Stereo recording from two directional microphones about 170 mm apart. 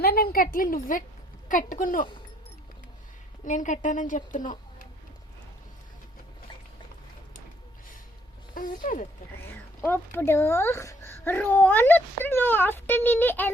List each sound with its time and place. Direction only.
0.0 s a woman's voice: 65° left (ahead or behind)
3.4 s a child's voice: 45° left (ahead or behind)
8.5 s a woman's voice: 50° left (ahead or behind)
9.4 s speech: 10° left (ahead or behind)